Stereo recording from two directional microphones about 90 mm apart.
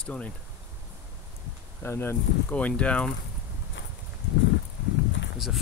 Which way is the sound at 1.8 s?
25° left (ahead or behind).